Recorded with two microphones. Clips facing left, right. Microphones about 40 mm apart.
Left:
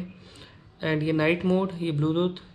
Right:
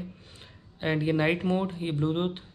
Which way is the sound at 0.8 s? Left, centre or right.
Centre.